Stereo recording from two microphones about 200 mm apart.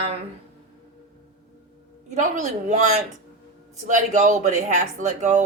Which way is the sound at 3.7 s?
40° right (ahead or behind).